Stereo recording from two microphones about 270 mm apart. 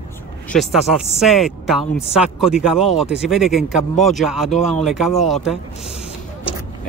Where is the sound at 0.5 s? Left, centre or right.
Centre.